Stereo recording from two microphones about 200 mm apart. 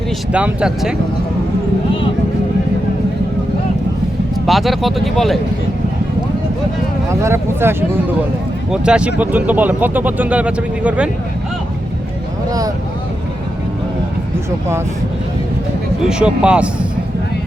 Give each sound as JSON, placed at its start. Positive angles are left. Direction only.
{"t": 0.3, "sound": "speech", "side_deg": -5}
{"t": 4.4, "sound": "speech", "side_deg": 0}
{"t": 7.1, "sound": "speech", "side_deg": -15}
{"t": 12.5, "sound": "speech", "side_deg": -20}
{"t": 16.0, "sound": "speech", "side_deg": -5}